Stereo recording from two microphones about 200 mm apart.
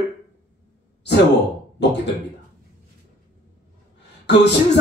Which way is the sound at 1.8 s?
60° left (ahead or behind).